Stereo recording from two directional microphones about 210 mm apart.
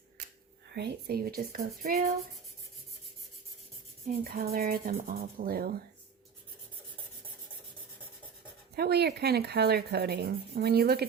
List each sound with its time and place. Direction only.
0.7 s speech: 50° right (ahead or behind)
4.0 s speech: 45° right (ahead or behind)
8.7 s speech: 50° right (ahead or behind)